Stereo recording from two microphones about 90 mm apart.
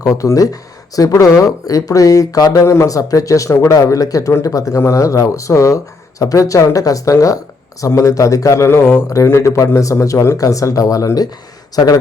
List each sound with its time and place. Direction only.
0.0 s speech: 35° left (ahead or behind)